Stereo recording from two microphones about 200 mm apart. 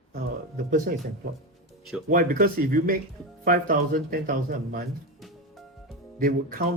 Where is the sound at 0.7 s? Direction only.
40° right (ahead or behind).